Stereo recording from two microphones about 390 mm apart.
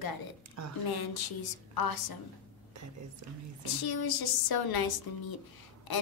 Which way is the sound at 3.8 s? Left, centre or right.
Left.